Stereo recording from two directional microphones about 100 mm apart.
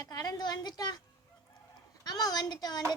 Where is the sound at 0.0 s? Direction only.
40° left (ahead or behind).